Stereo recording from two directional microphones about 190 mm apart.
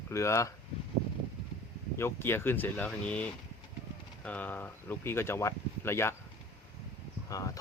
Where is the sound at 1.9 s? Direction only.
10° left (ahead or behind).